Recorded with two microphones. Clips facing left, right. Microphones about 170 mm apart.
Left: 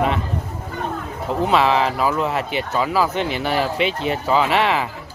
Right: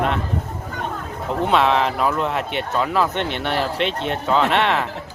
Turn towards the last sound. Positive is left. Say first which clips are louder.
# even
turn(degrees=0)  # may be behind; listen again after turning